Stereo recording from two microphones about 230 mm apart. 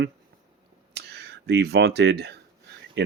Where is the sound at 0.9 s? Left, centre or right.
Right.